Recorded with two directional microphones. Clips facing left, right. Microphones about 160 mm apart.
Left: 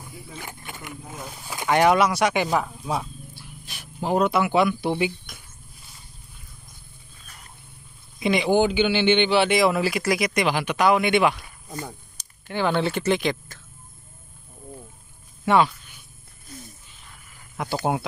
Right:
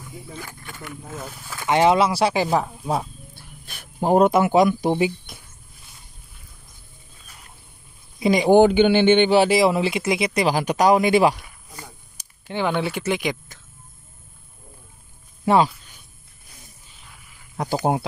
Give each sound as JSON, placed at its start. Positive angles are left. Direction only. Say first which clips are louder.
{"t": 0.4, "sound": "speech", "louder": "right 1 dB", "side_deg": 20}
{"t": 1.7, "sound": "speech", "louder": "right 1 dB", "side_deg": -25}
{"t": 3.3, "sound": "speech", "louder": "left 1 dB", "side_deg": -55}
{"t": 4.9, "sound": "speech", "louder": "right 3 dB", "side_deg": -30}
{"t": 8.2, "sound": "a man's voice", "louder": "right 6 dB", "side_deg": -40}
{"t": 12.2, "sound": "speech", "louder": "right 1 dB", "side_deg": -15}
{"t": 15.4, "sound": "speech", "louder": "right 2 dB", "side_deg": -35}
{"t": 17.6, "sound": "speech", "louder": "right 3 dB", "side_deg": -35}